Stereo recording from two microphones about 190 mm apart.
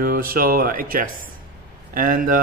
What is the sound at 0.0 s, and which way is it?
Speech, 50° right (ahead or behind).